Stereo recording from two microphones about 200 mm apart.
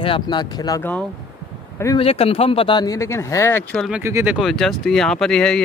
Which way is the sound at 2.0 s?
30° left (ahead or behind).